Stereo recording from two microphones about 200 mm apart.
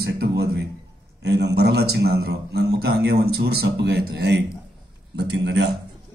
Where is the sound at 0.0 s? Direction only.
55° right (ahead or behind).